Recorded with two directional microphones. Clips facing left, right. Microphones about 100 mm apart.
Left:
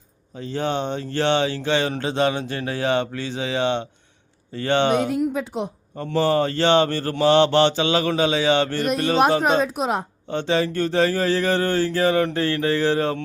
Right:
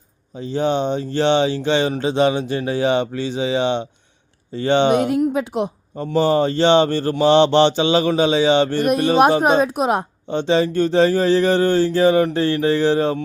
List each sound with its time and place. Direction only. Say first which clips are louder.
0.3 s speech: right 5 dB; 15° right (ahead or behind)
5.3 s a woman's voice: right 5 dB; 70° right (ahead or behind)
6.1 s speech: right 3 dB; 20° right (ahead or behind)
9.4 s speech: right 4 dB; 50° right (ahead or behind)
10.2 s speech: right 4 dB; 20° right (ahead or behind)